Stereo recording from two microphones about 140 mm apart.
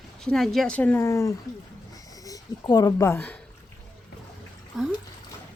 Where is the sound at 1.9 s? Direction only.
25° left (ahead or behind).